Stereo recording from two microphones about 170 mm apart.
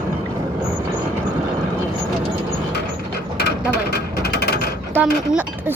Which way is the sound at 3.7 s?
75° left (ahead or behind).